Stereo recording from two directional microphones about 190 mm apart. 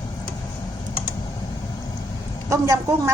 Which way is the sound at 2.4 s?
15° right (ahead or behind).